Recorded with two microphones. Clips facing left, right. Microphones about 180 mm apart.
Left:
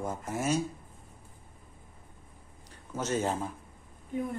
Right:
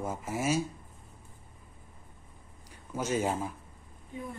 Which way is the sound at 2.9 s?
10° right (ahead or behind).